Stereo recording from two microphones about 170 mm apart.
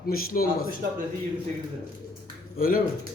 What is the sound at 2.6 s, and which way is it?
Speech, 60° left (ahead or behind).